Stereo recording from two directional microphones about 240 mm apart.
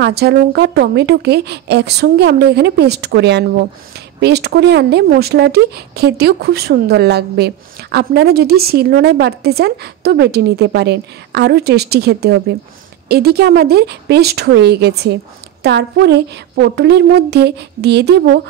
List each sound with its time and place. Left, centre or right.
0.0 s speech: right